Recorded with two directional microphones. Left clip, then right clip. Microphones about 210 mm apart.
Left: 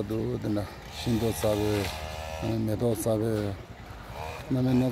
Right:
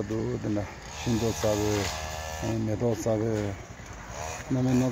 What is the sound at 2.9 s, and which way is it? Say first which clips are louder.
Speech: even; 15° left (ahead or behind).